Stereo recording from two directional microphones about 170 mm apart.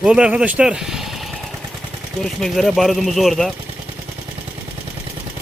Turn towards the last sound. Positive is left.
turn(degrees=0)  # may be behind; listen again after turning